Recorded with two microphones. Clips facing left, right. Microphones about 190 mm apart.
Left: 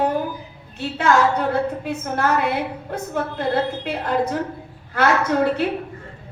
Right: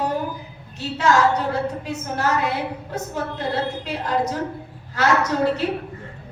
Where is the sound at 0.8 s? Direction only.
55° left (ahead or behind).